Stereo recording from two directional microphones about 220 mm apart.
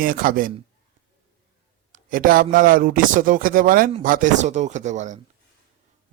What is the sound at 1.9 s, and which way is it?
A man's voice, 40° right (ahead or behind).